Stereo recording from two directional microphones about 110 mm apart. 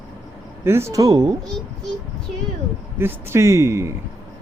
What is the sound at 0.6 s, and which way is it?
Speech, 25° right (ahead or behind).